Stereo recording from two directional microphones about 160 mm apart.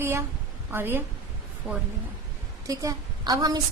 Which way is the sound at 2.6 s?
20° right (ahead or behind).